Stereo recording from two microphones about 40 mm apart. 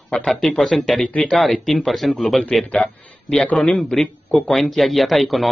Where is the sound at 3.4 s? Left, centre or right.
Left.